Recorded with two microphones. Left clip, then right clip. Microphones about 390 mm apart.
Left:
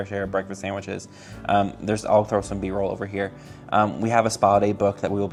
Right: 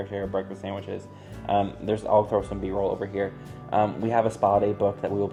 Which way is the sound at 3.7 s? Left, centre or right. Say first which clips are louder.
Left 3 dB; left.